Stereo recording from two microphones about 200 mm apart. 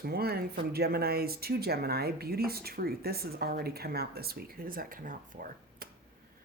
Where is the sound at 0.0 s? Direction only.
50° right (ahead or behind).